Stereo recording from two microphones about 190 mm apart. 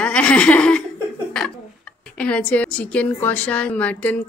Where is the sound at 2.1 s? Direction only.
5° left (ahead or behind).